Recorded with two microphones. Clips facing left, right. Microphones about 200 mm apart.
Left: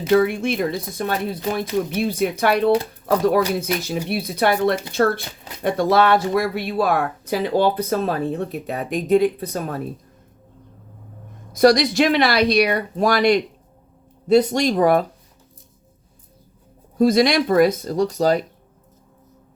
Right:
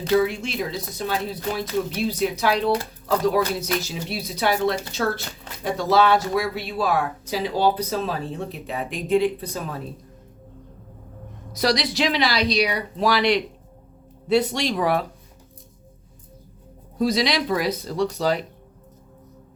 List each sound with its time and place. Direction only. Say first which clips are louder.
0.1 s speech: left 4 dB; 55° left (ahead or behind)
11.5 s speech: left 8 dB; 50° left (ahead or behind)
17.0 s speech: left 6 dB; 50° left (ahead or behind)